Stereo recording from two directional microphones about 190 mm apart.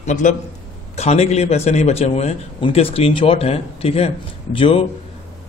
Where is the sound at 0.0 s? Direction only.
40° left (ahead or behind).